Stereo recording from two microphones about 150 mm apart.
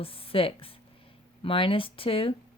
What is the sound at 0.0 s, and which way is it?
Speech, 40° left (ahead or behind).